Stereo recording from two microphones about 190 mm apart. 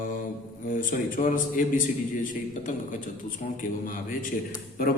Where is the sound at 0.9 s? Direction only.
45° left (ahead or behind).